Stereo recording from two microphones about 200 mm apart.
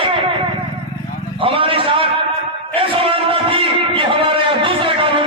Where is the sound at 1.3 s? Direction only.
25° right (ahead or behind).